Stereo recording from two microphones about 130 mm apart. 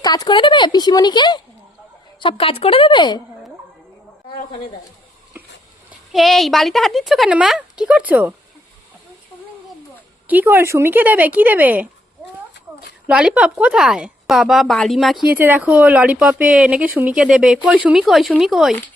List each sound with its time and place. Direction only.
0.0 s a woman's voice: 30° left (ahead or behind)
2.2 s a woman's voice: 45° left (ahead or behind)
6.1 s a woman's voice: centre (ahead or behind)
10.2 s speech: 15° right (ahead or behind)
13.1 s a woman's voice: 10° right (ahead or behind)
15.4 s a woman's voice: 15° right (ahead or behind)